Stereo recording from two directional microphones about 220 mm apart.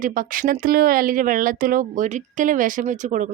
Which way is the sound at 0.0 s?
40° right (ahead or behind).